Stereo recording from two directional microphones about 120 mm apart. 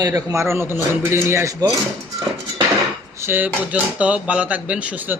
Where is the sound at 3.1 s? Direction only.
20° right (ahead or behind).